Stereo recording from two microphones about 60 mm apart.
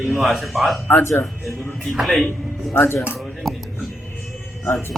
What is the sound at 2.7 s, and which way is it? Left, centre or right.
Speech, left.